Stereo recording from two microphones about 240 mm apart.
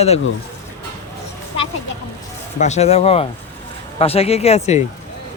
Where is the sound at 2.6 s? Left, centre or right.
Left.